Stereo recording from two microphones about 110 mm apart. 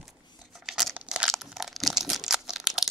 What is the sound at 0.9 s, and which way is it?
Crumpling, 15° right (ahead or behind).